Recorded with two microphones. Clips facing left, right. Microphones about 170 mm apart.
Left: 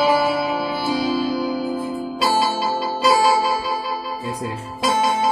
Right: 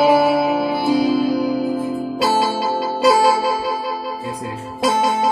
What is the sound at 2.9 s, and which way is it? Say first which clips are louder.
Music: right 3 dB; 65° right (ahead or behind).